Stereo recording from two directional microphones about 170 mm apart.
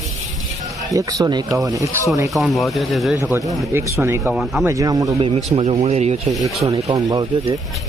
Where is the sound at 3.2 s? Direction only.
20° right (ahead or behind).